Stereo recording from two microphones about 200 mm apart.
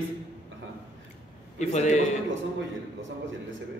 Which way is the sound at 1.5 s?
35° left (ahead or behind).